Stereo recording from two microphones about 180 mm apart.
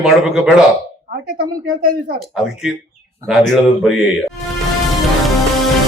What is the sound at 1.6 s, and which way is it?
Speech, 50° right (ahead or behind).